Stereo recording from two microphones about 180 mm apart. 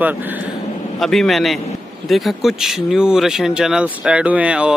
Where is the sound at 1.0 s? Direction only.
Centre (ahead or behind).